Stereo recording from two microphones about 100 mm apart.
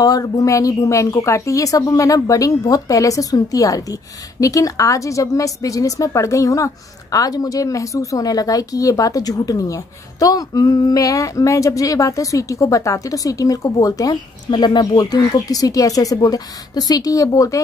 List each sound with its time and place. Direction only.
0.0 s a woman's voice: 35° left (ahead or behind)